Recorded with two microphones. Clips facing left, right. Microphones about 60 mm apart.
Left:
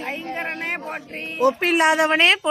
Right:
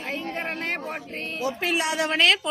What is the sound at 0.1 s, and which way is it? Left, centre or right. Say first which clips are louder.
Speech: even; left.